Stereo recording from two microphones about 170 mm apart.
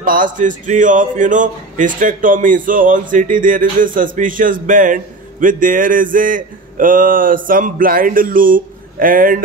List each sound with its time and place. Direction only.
0.0 s a man's voice: 50° right (ahead or behind)